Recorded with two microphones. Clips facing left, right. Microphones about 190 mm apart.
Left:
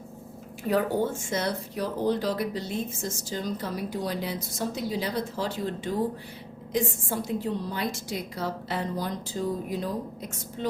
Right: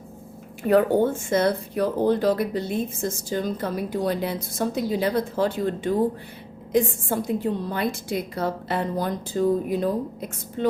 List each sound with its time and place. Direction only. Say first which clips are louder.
0.7 s speech: right 7 dB; 60° right (ahead or behind)